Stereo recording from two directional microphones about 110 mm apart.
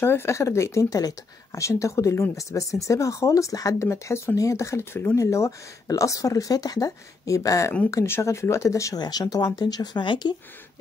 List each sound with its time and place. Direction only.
0.0 s speech: 20° left (ahead or behind); by 10.3 s 45° left (ahead or behind)